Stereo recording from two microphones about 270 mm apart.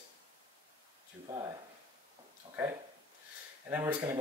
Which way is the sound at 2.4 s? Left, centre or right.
Centre.